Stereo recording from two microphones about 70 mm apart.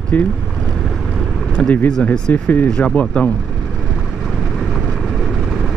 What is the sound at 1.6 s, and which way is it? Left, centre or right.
Speech, centre.